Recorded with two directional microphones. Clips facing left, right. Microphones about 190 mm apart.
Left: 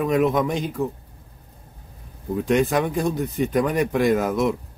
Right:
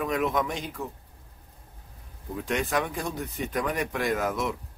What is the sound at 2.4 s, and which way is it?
A man's voice, 25° left (ahead or behind).